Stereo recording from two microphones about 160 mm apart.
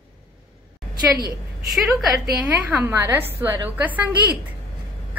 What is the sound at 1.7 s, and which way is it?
Speech, centre (ahead or behind).